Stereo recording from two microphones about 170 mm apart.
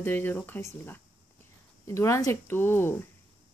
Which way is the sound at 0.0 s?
10° left (ahead or behind).